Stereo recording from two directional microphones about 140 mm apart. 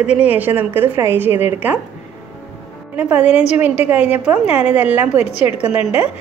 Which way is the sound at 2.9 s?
10° right (ahead or behind).